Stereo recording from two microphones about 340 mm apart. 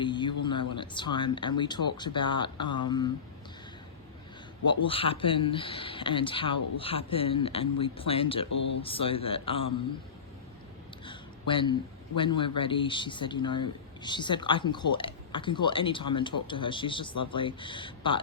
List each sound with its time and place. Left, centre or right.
0.0 s speech: centre
4.6 s a man's voice: centre
8.4 s speech: left
8.8 s a man's voice: centre
11.0 s a man's voice: centre